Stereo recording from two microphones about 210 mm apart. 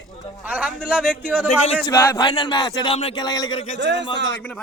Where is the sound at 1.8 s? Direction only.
15° left (ahead or behind).